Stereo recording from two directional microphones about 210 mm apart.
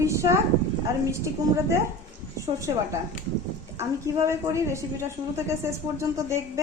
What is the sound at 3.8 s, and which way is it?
A woman's voice, 15° right (ahead or behind).